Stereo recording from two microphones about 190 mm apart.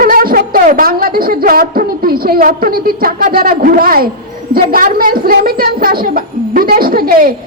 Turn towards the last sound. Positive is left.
turn(degrees=-50)  # may be behind; listen again after turning